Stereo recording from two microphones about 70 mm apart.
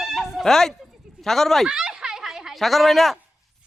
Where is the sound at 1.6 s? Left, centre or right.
Centre.